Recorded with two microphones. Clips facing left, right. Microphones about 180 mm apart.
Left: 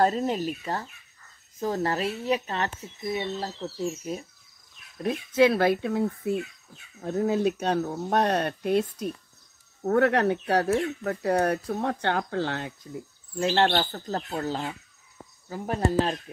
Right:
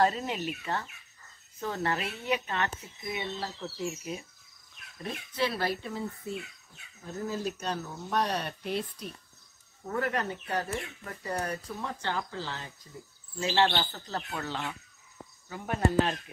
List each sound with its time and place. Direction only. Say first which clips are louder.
0.0 s speech: left 4 dB; 40° left (ahead or behind)
5.4 s speech: left 10 dB; 55° left (ahead or behind)
9.8 s speech: left 10 dB; 75° left (ahead or behind); by 16.2 s 35° left (ahead or behind)